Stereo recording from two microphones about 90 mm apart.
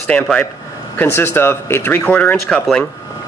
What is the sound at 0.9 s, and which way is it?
Speech, 25° left (ahead or behind).